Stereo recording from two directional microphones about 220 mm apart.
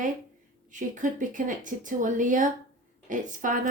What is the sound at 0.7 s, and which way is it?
Speech, 35° right (ahead or behind).